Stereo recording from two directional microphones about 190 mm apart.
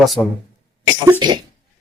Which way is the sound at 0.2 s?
10° left (ahead or behind).